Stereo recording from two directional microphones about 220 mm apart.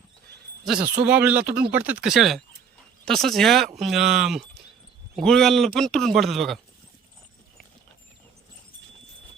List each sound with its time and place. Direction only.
0.6 s a man's voice: centre (ahead or behind)
1.5 s speech: 45° right (ahead or behind)
1.7 s a man's voice: 5° right (ahead or behind)